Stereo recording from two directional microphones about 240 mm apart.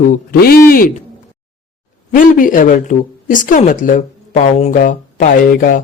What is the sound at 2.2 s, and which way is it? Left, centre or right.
Speech, left.